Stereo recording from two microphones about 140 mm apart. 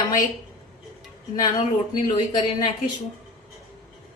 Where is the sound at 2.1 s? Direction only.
30° left (ahead or behind).